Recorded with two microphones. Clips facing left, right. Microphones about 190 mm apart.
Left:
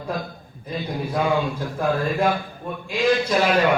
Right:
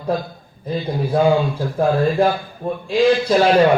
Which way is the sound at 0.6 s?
30° right (ahead or behind).